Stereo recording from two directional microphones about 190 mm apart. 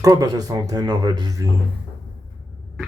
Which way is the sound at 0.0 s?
20° right (ahead or behind).